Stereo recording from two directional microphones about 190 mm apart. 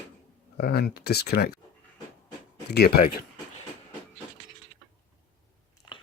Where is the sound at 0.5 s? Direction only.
55° left (ahead or behind).